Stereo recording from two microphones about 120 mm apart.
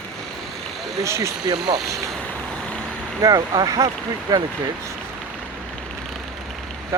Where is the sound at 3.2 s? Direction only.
30° right (ahead or behind).